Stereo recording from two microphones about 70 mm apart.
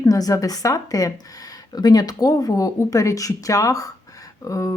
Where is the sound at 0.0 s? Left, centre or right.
Left.